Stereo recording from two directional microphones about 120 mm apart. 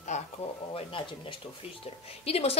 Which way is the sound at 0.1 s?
70° left (ahead or behind).